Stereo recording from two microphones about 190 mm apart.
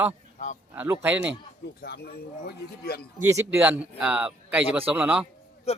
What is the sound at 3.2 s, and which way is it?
Speech, 15° right (ahead or behind).